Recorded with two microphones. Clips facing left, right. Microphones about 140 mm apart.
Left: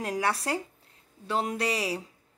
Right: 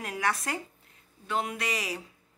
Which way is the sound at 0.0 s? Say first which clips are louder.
Left 2 dB; 30° left (ahead or behind).